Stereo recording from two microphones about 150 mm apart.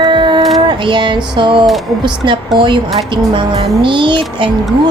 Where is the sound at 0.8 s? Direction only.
30° right (ahead or behind).